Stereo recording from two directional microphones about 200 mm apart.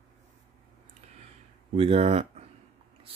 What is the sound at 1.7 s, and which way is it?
Speech, 30° right (ahead or behind).